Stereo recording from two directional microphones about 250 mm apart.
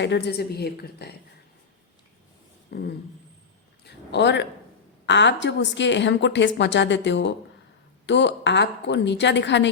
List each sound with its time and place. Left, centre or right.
0.0 s a woman's voice: left
2.6 s a sound: left
3.8 s a woman's voice: left